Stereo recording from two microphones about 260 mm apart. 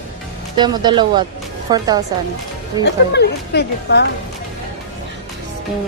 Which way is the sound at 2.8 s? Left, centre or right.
Left.